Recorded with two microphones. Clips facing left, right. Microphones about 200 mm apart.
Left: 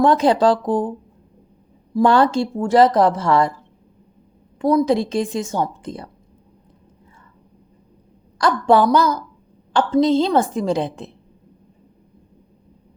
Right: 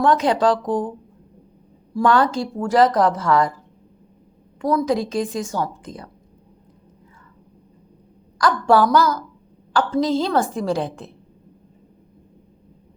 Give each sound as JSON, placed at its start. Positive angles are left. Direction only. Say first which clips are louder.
{"t": 0.0, "sound": "a woman's voice", "louder": "left 3 dB", "side_deg": 30}
{"t": 2.0, "sound": "a woman's voice", "louder": "left 2 dB", "side_deg": 30}
{"t": 4.6, "sound": "a woman's voice", "louder": "left 3 dB", "side_deg": 25}
{"t": 8.4, "sound": "a woman's voice", "louder": "left 1 dB", "side_deg": 25}